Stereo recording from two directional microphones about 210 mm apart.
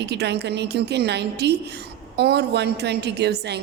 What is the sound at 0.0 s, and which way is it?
A woman's voice, 55° right (ahead or behind).